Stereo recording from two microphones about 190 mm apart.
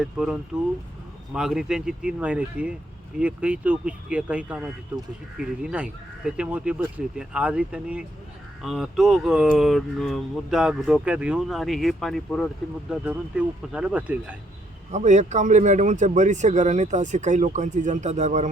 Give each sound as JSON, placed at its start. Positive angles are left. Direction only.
{"t": 0.0, "sound": "speech", "side_deg": -5}
{"t": 14.9, "sound": "speech", "side_deg": -40}